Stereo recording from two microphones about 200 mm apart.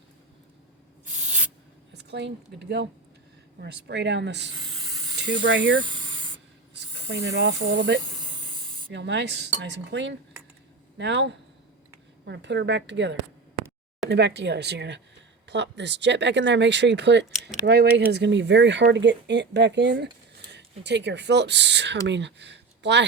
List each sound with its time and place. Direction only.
1.9 s speech: 60° right (ahead or behind)
4.5 s steam: 20° right (ahead or behind)
5.4 s speech: 65° right (ahead or behind)
5.8 s spray: 20° right (ahead or behind)
7.1 s speech: 55° right (ahead or behind)
8.0 s spray: 20° right (ahead or behind)
8.9 s speech: 60° right (ahead or behind)